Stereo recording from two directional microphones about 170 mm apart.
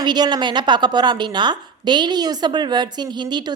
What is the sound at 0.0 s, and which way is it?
A woman's voice, 25° right (ahead or behind).